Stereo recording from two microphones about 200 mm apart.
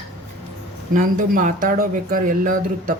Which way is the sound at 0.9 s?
40° right (ahead or behind).